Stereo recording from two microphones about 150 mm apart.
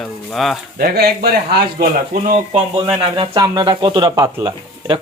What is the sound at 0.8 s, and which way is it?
Speech, 85° right.